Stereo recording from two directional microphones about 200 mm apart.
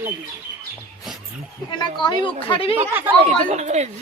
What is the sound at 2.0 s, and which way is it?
Speech, 25° left (ahead or behind).